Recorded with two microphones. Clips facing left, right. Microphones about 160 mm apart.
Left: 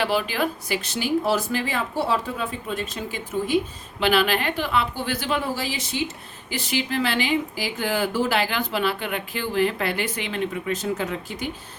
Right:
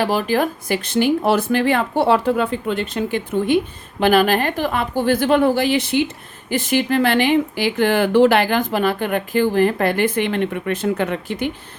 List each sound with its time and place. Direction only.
0.0 s speech: 40° right (ahead or behind); by 3.6 s 60° right (ahead or behind)
4.0 s a woman's voice: 45° right (ahead or behind); by 11.5 s 60° right (ahead or behind)